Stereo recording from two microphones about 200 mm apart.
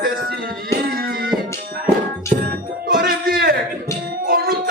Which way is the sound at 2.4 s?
45° right (ahead or behind).